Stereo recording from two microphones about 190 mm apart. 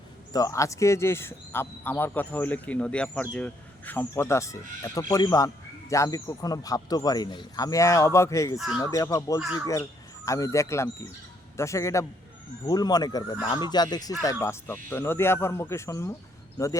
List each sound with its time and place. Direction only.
0.3 s a man's voice: 15° left (ahead or behind)
8.5 s speech: centre (ahead or behind)
8.8 s a man's voice: 15° left (ahead or behind)